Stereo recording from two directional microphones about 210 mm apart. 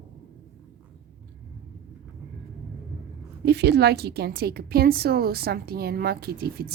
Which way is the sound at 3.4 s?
50° right (ahead or behind).